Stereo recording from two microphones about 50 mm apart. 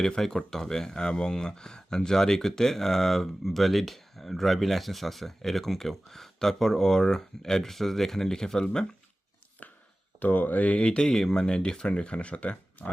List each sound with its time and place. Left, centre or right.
0.2 s speech: centre
10.2 s speech: left
10.8 s speech: centre